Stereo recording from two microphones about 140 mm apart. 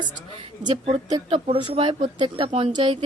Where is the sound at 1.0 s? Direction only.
35° right (ahead or behind).